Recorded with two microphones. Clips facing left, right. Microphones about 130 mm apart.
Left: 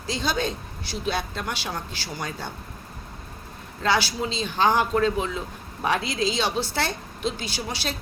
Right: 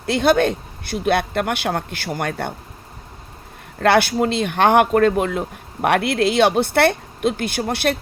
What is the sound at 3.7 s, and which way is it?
Speech, 60° right (ahead or behind).